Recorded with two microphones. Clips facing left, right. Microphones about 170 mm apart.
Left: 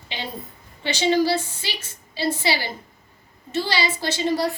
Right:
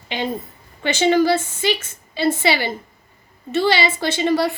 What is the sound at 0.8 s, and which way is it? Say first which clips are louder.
A woman's voice: right 4 dB; 55° right (ahead or behind).